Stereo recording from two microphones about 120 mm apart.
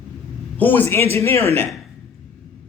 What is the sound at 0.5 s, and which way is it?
Speech, 15° left (ahead or behind).